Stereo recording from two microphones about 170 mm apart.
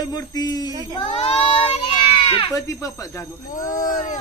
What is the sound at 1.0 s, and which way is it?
Speech, 40° left (ahead or behind).